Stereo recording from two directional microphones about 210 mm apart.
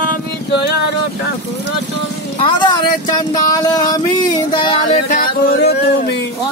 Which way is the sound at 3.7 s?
20° left (ahead or behind).